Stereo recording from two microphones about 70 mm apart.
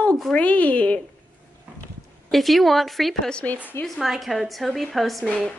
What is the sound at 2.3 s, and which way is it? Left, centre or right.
Speech, centre.